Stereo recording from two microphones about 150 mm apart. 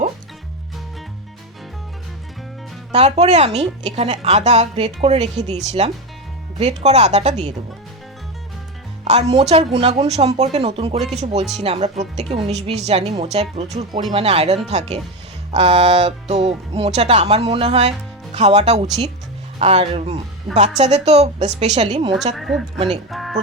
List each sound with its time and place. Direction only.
2.9 s a woman's voice: 45° right (ahead or behind)
9.0 s a woman's voice: 45° right (ahead or behind)
22.4 s speech: centre (ahead or behind)